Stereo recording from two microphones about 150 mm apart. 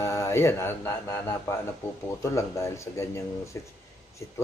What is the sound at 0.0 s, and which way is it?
Speech, 20° left (ahead or behind).